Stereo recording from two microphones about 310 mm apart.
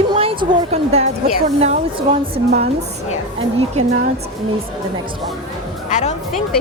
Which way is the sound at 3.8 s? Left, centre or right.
Right.